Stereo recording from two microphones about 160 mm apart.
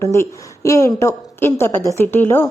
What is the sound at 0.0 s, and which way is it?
A woman's voice, 15° left (ahead or behind).